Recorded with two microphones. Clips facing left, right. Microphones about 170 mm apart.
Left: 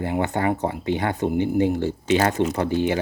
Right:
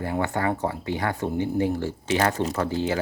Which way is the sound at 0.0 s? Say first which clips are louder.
Left 3 dB; 20° left (ahead or behind).